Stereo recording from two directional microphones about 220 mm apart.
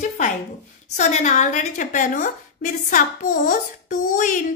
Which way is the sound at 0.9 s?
30° left (ahead or behind).